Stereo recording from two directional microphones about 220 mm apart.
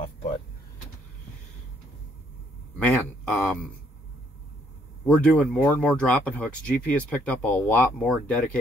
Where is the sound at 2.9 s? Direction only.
5° left (ahead or behind).